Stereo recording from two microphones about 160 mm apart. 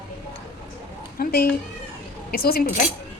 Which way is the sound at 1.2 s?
70° left (ahead or behind).